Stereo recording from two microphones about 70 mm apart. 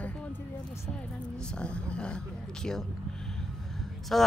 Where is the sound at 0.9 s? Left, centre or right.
Centre.